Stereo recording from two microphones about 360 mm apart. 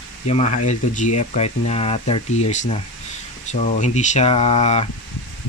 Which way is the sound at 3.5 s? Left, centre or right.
Centre.